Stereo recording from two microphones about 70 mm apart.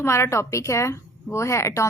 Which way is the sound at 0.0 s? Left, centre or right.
Left.